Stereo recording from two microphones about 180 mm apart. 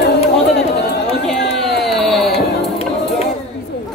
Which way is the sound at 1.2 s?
Centre (ahead or behind).